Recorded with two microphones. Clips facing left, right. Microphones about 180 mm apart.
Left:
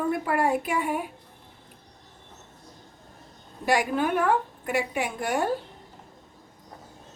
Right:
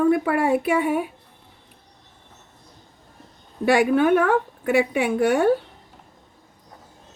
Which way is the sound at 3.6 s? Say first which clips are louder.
Right 7 dB; 65° right (ahead or behind).